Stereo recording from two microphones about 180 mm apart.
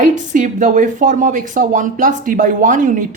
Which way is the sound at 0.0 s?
45° right (ahead or behind).